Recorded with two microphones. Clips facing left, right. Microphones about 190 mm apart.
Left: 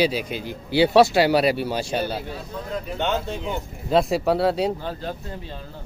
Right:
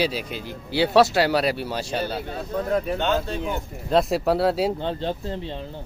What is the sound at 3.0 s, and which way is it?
Speech, 15° left (ahead or behind).